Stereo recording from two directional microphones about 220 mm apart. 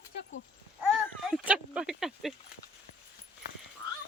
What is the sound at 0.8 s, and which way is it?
Speech, centre (ahead or behind).